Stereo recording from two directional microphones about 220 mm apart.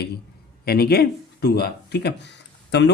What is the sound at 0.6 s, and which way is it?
Speech, 45° left (ahead or behind).